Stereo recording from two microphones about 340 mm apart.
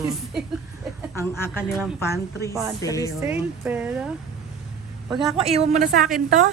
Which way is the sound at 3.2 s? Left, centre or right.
Centre.